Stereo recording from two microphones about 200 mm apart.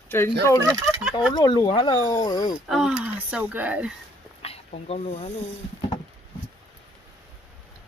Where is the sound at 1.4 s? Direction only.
20° left (ahead or behind).